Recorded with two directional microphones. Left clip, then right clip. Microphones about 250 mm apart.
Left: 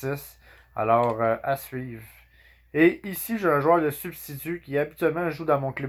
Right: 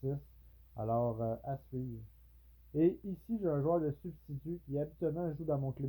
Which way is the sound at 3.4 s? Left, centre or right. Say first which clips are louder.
Left 13 dB; left.